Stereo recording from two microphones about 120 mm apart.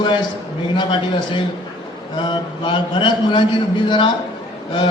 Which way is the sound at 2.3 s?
40° left (ahead or behind).